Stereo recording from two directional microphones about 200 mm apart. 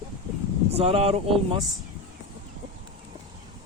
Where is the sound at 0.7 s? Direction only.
30° right (ahead or behind).